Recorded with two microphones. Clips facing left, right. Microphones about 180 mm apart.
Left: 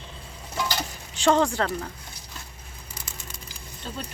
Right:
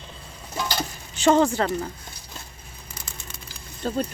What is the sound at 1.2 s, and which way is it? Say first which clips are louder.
Speech: right 3 dB; 5° right (ahead or behind).